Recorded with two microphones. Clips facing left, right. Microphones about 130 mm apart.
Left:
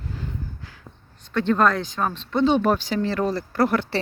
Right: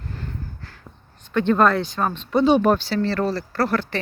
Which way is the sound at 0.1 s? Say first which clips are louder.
Left 1 dB; 10° left (ahead or behind).